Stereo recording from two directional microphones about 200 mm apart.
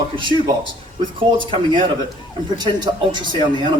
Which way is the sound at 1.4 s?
25° right (ahead or behind).